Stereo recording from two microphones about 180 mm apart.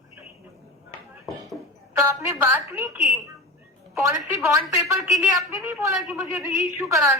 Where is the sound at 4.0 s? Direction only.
15° right (ahead or behind).